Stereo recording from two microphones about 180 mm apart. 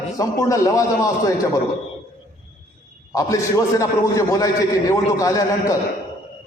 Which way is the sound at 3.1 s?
20° left (ahead or behind).